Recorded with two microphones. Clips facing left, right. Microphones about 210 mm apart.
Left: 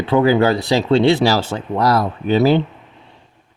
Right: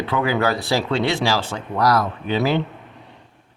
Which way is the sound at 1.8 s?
25° left (ahead or behind).